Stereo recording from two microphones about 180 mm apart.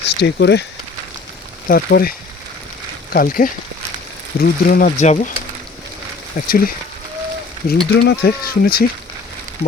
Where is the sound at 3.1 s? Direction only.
55° left (ahead or behind).